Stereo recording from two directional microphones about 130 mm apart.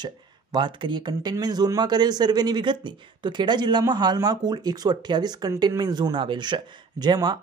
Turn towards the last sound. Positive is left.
turn(degrees=-30)  # may be behind; listen again after turning